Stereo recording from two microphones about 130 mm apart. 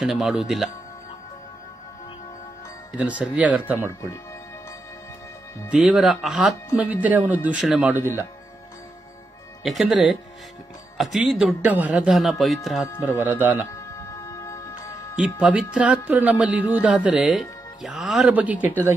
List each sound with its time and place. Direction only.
0.0 s speech: 5° right (ahead or behind)
3.0 s speech: 10° right (ahead or behind)
5.7 s speech: 5° right (ahead or behind)
9.6 s speech: centre (ahead or behind)
13.2 s speech: 15° right (ahead or behind)
14.3 s music: 25° left (ahead or behind)
15.4 s speech: 10° right (ahead or behind)